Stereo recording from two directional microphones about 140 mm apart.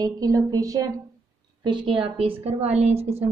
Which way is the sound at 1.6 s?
35° right (ahead or behind).